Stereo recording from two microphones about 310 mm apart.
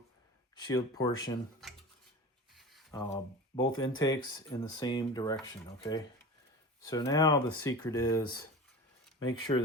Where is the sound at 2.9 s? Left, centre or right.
Centre.